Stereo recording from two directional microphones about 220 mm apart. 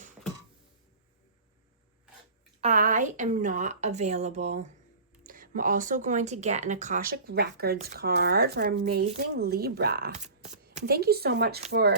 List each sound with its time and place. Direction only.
2.6 s speech: 35° right (ahead or behind)